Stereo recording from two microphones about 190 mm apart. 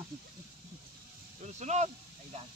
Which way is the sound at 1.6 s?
35° right (ahead or behind).